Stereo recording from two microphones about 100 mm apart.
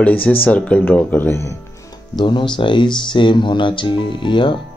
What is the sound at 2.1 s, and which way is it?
Speech, 50° left (ahead or behind).